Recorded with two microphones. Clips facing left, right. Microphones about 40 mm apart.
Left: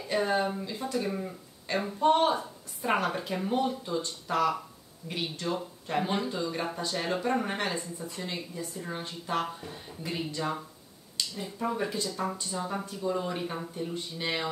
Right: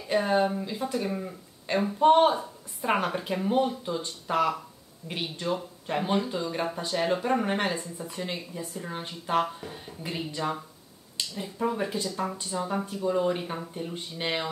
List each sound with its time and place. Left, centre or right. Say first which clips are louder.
0.1 s a woman's voice: right 3 dB; centre
2.0 s speech: right 4 dB; right
2.3 s a woman's voice: right 1 dB; centre; by 9.5 s right
9.5 s a woman's voice: right 1 dB; centre; by 14.4 s right